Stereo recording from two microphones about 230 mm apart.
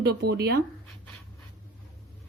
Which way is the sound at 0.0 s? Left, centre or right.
Right.